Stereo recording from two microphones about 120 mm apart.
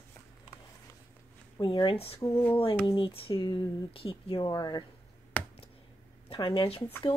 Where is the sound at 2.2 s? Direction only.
20° left (ahead or behind).